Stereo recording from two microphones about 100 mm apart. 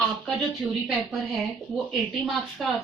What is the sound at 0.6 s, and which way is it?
Speech, 5° right (ahead or behind).